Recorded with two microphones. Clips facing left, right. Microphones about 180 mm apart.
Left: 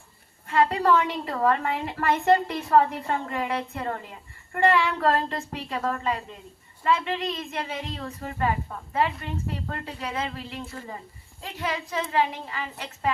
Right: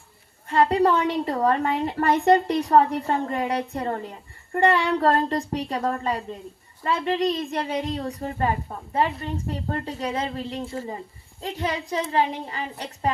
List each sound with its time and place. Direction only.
0.4 s a woman's voice: 35° right (ahead or behind)